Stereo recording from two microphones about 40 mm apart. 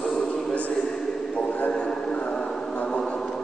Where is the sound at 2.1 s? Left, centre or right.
Left.